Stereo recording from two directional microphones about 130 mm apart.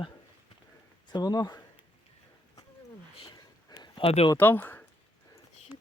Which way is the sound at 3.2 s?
40° left (ahead or behind).